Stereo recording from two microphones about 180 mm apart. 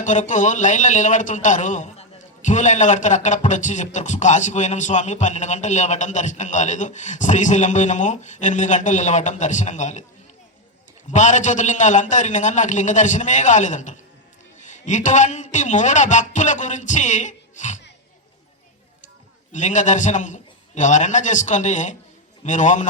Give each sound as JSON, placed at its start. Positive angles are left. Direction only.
{"t": 0.0, "sound": "speech", "side_deg": 45}
{"t": 11.1, "sound": "speech", "side_deg": 45}
{"t": 19.5, "sound": "speech", "side_deg": 45}